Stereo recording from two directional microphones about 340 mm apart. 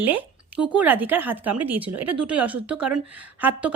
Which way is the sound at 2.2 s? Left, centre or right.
Centre.